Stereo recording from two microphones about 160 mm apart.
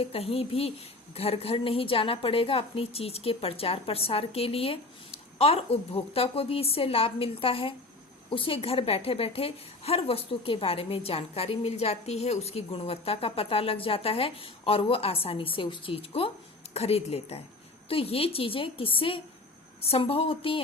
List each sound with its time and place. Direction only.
0.0 s a woman's voice: 40° left (ahead or behind)